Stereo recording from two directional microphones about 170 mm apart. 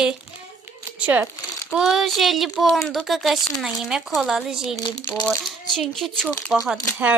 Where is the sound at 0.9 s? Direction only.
10° right (ahead or behind).